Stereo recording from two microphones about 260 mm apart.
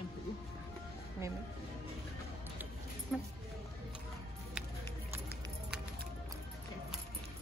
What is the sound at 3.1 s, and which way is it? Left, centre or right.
Speech, centre.